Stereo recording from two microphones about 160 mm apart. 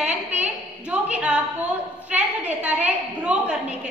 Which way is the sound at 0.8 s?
10° right (ahead or behind).